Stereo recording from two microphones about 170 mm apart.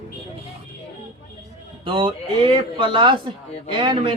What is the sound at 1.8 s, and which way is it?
Speech, 30° right (ahead or behind).